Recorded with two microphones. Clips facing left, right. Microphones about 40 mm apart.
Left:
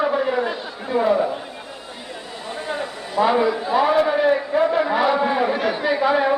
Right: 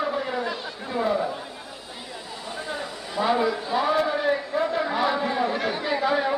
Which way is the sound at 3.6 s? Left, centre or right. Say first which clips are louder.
Left 5 dB; centre.